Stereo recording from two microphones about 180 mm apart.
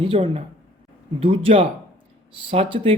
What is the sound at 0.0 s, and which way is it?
Speech, 30° right (ahead or behind).